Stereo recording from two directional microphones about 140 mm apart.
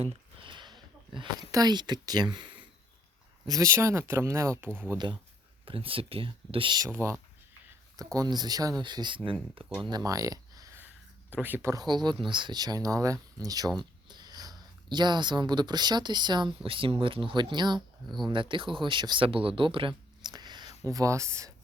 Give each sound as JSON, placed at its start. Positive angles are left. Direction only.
{"t": 0.0, "sound": "a sound", "side_deg": -40}
{"t": 3.4, "sound": "speech", "side_deg": -25}
{"t": 4.9, "sound": "speech", "side_deg": -35}
{"t": 6.9, "sound": "speech", "side_deg": -20}
{"t": 9.6, "sound": "speech", "side_deg": -5}
{"t": 9.9, "sound": "speech", "side_deg": -25}
{"t": 11.3, "sound": "speech", "side_deg": -15}